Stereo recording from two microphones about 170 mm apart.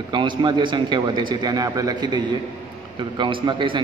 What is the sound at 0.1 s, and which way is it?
A man's voice, 30° right (ahead or behind).